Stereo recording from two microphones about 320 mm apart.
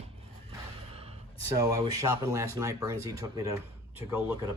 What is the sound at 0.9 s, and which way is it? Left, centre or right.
Gasp, centre.